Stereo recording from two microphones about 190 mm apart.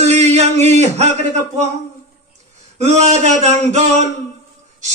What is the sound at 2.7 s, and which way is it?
A man's voice, 35° right (ahead or behind).